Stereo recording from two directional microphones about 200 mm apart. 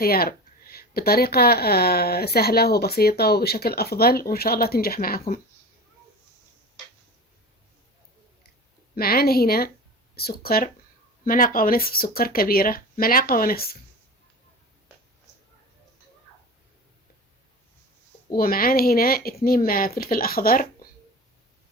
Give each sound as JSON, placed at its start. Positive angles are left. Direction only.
{"t": 0.0, "sound": "speech", "side_deg": 50}
{"t": 9.0, "sound": "speech", "side_deg": 50}
{"t": 18.3, "sound": "speech", "side_deg": 45}